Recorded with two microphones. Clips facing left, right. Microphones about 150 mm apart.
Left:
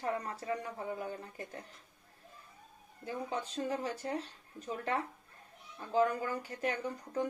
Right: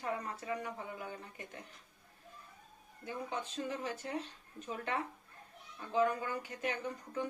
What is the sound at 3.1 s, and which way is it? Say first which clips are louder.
Speech: left 2 dB; 35° left (ahead or behind).